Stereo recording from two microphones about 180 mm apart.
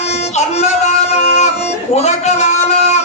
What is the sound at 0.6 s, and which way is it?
Music, 40° left (ahead or behind).